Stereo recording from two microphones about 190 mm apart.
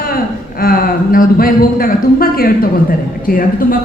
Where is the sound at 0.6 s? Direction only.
50° left (ahead or behind).